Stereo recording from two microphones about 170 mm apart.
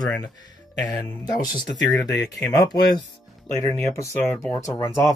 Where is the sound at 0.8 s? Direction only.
25° left (ahead or behind).